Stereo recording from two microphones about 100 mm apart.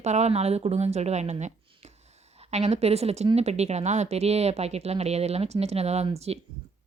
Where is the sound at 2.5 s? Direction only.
90° right.